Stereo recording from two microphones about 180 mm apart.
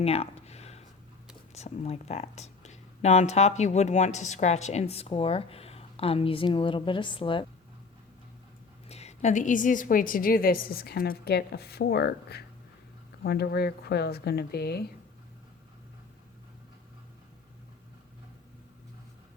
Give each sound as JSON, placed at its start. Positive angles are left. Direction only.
{"t": 0.0, "sound": "a sound", "side_deg": 35}
{"t": 1.5, "sound": "speech", "side_deg": 35}
{"t": 8.9, "sound": "a woman's voice", "side_deg": 35}